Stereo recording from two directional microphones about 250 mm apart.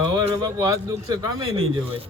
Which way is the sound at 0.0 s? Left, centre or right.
Centre.